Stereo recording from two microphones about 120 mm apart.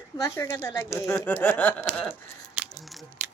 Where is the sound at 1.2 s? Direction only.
15° left (ahead or behind).